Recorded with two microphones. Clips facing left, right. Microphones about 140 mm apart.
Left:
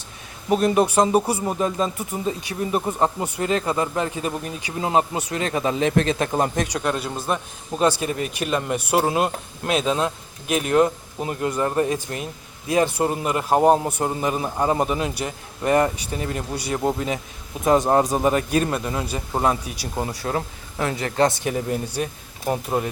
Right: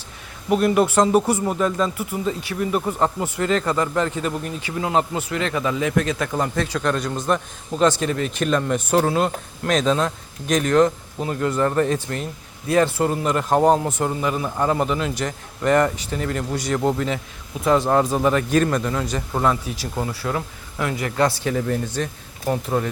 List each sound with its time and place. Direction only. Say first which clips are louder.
0.5 s speech: right 1 dB; 20° left (ahead or behind)
20.2 s speech: even; 35° left (ahead or behind); by 22.9 s 15° left (ahead or behind)